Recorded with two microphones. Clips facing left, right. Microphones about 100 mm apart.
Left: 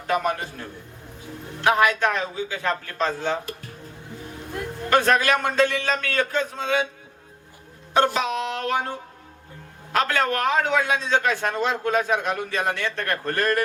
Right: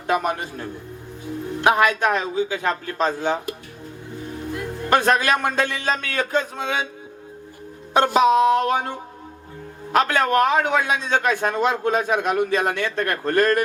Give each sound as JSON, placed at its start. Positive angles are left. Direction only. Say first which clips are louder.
{"t": 0.1, "sound": "a man's voice", "louder": "right 2 dB", "side_deg": -20}
{"t": 1.6, "sound": "a man's voice", "louder": "right 2 dB", "side_deg": -20}
{"t": 4.9, "sound": "a man's voice", "louder": "right 1 dB", "side_deg": -20}
{"t": 7.9, "sound": "a sound", "louder": "right 6 dB", "side_deg": -20}
{"t": 9.9, "sound": "a man's voice", "louder": "right 4 dB", "side_deg": -20}